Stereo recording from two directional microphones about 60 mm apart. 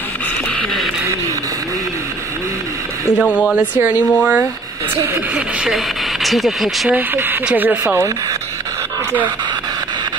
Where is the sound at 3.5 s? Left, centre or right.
Right.